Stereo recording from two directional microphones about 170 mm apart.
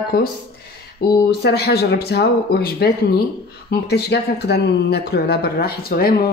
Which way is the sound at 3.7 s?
75° left (ahead or behind).